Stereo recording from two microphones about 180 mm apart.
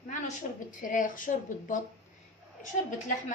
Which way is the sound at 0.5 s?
45° left (ahead or behind).